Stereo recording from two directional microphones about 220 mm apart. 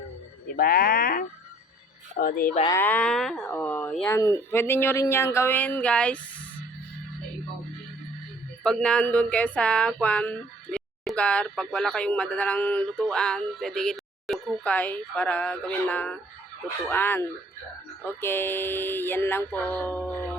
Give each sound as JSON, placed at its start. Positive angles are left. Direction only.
{"t": 0.5, "sound": "speech", "side_deg": 40}
{"t": 2.6, "sound": "speech", "side_deg": 10}
{"t": 8.6, "sound": "speech", "side_deg": 5}